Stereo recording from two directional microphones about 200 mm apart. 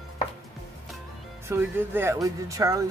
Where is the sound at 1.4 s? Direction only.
10° right (ahead or behind).